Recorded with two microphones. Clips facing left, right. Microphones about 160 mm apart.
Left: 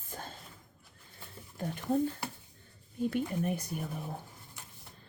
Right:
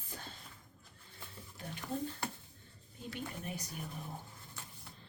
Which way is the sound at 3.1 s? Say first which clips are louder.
Left 7 dB; 55° left (ahead or behind).